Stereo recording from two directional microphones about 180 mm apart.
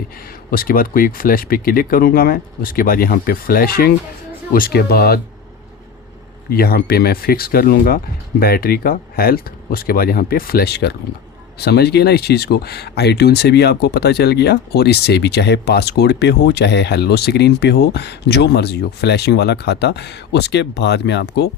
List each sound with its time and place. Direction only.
0.5 s speech: 55° left (ahead or behind)
6.5 s speech: 60° left (ahead or behind)